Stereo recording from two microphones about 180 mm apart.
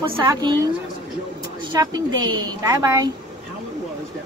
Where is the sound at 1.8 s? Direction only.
20° right (ahead or behind).